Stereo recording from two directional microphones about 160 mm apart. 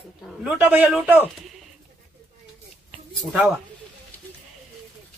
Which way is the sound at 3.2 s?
Centre (ahead or behind).